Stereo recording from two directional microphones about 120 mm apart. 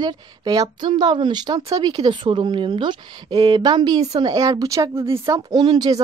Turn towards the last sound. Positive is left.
turn(degrees=-35)  # may be behind; listen again after turning